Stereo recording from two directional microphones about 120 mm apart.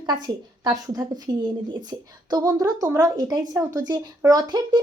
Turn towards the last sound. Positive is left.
turn(degrees=-35)  # may be behind; listen again after turning